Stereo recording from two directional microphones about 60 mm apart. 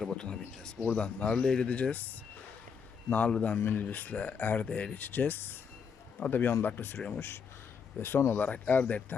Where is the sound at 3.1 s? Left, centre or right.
Left.